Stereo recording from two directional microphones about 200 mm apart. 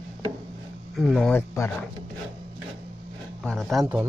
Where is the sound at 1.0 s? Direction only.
Centre (ahead or behind).